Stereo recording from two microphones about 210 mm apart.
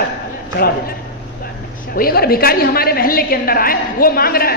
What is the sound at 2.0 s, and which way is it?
A woman's voice, 45° left (ahead or behind).